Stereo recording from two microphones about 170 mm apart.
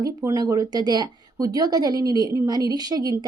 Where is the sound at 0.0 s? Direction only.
20° right (ahead or behind).